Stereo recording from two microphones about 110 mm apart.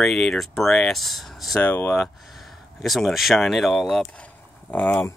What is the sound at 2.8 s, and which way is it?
Speech, centre (ahead or behind).